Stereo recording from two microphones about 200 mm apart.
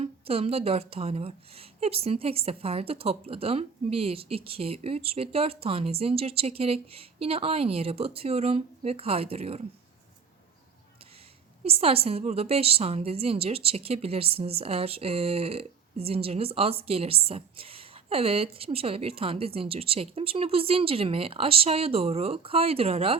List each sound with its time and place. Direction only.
0.0 s a woman's voice: 30° right (ahead or behind)
11.6 s a woman's voice: 30° right (ahead or behind)